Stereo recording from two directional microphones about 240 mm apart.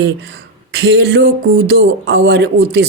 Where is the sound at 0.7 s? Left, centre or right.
Right.